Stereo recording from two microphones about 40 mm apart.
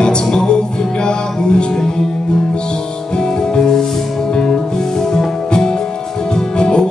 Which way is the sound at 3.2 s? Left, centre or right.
Centre.